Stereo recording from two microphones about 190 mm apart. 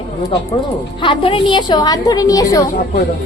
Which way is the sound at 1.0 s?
25° left (ahead or behind).